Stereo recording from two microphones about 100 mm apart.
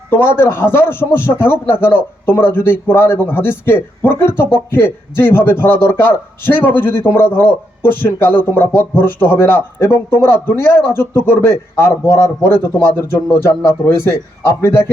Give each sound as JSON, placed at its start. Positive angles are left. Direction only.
{"t": 0.1, "sound": "a man's voice", "side_deg": 20}
{"t": 13.7, "sound": "a man's voice", "side_deg": 25}